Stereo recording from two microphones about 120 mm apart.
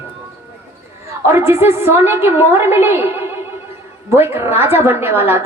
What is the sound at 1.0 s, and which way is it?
A woman's voice, 20° right (ahead or behind).